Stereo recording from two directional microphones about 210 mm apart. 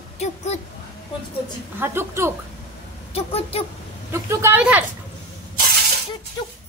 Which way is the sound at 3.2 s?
30° left (ahead or behind).